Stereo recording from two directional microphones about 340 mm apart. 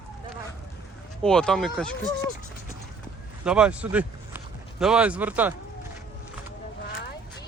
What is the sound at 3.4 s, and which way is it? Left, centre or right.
Speech, centre.